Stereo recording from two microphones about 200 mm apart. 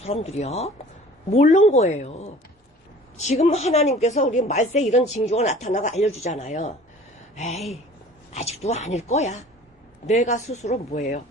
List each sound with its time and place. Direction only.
0.0 s a woman's voice: 30° left (ahead or behind)